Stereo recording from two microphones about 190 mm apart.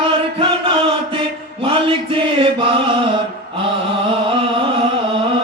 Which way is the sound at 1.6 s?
30° right (ahead or behind).